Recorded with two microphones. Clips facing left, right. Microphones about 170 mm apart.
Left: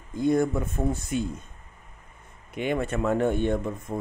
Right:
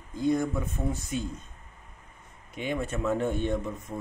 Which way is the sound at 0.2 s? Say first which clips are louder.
Left 3 dB; 55° left (ahead or behind).